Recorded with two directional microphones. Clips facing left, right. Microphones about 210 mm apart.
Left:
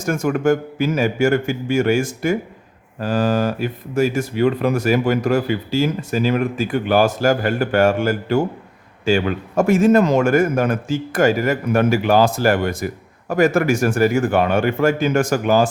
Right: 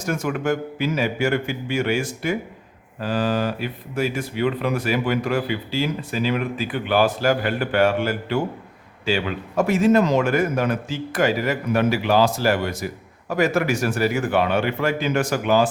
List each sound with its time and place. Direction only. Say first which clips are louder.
0.0 s a man's voice: left 5 dB; 50° left (ahead or behind)